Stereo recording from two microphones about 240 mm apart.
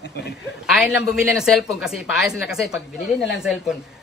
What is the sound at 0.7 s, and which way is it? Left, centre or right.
Speech, centre.